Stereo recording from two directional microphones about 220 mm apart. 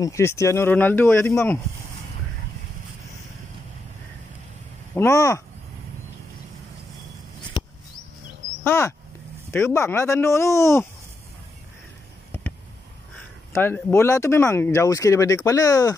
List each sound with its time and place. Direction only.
0.0 s speech: 10° left (ahead or behind)
4.9 s speech: 15° left (ahead or behind)
8.6 s speech: 10° left (ahead or behind)
13.5 s speech: 10° left (ahead or behind)